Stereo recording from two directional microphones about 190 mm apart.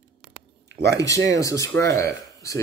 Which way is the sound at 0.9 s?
15° left (ahead or behind).